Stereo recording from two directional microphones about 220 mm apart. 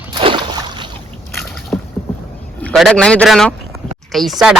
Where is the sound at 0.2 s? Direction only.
20° right (ahead or behind).